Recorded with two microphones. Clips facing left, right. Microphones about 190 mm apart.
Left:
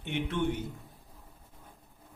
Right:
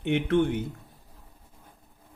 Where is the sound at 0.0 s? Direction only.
60° right (ahead or behind).